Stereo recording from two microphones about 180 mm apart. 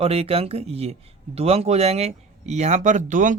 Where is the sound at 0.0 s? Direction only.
35° right (ahead or behind).